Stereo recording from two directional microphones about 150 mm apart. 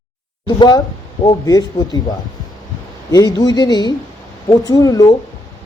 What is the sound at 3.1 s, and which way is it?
Speech, 25° left (ahead or behind).